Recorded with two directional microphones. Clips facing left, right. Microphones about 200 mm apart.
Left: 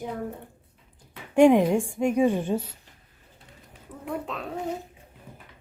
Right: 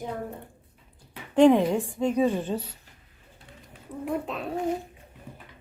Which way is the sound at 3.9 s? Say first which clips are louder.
Right 7 dB; 25° right (ahead or behind).